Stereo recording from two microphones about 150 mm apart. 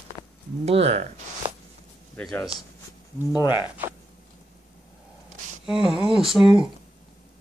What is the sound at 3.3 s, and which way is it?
Speech, 30° left (ahead or behind).